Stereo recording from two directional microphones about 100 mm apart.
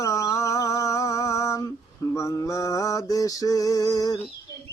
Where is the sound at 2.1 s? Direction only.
30° left (ahead or behind).